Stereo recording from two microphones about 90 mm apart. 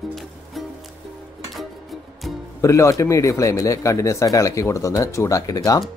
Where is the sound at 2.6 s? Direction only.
35° left (ahead or behind).